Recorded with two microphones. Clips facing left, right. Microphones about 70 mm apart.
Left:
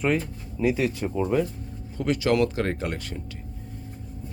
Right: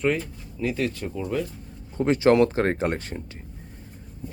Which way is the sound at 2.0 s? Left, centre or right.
Right.